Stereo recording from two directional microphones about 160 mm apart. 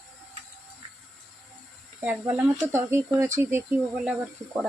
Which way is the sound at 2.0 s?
10° right (ahead or behind).